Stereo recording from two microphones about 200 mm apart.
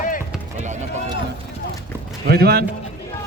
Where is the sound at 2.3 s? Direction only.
50° right (ahead or behind).